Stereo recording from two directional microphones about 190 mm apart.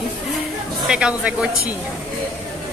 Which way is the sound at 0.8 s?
5° right (ahead or behind).